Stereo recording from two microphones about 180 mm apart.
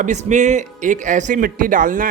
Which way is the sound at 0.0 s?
40° right (ahead or behind).